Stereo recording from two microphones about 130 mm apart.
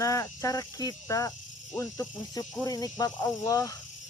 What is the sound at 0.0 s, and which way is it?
Speech, 25° left (ahead or behind).